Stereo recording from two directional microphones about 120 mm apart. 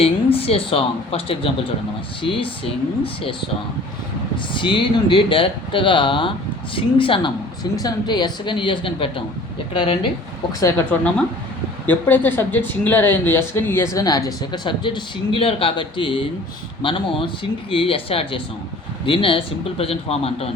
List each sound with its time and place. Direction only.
0.0 s a woman's voice: 55° left (ahead or behind)
4.5 s a woman's voice: 45° left (ahead or behind)
10.9 s speech: 10° left (ahead or behind)
13.9 s a woman's voice: 30° left (ahead or behind); by 20.5 s 55° left (ahead or behind)